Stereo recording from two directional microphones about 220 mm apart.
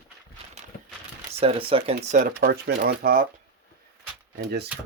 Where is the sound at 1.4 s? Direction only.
25° right (ahead or behind); by 3.3 s 40° right (ahead or behind).